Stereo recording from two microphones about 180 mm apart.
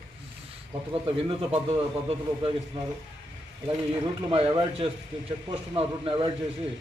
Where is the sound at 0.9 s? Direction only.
30° right (ahead or behind).